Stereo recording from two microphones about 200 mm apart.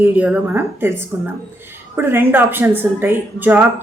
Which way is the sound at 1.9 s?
10° right (ahead or behind).